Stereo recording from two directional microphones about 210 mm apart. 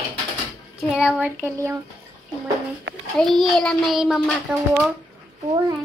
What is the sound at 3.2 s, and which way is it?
A child's voice, centre (ahead or behind).